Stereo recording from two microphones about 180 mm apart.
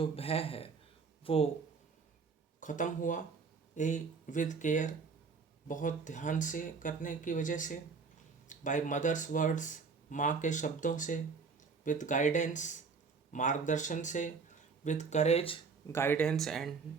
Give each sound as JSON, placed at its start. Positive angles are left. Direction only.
{"t": 0.0, "sound": "speech", "side_deg": 35}
{"t": 2.6, "sound": "speech", "side_deg": 45}
{"t": 15.9, "sound": "speech", "side_deg": 15}